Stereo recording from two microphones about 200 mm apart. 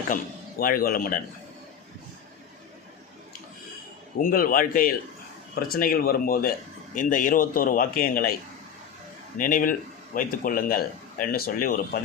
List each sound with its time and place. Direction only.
0.6 s speech: 45° left (ahead or behind)
4.2 s speech: 45° left (ahead or behind)
9.4 s speech: 45° left (ahead or behind)